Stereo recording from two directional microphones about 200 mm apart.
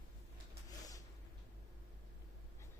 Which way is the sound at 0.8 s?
15° left (ahead or behind).